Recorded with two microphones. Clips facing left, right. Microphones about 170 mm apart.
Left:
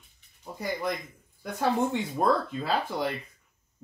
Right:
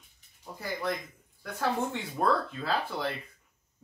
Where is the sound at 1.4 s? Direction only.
15° left (ahead or behind).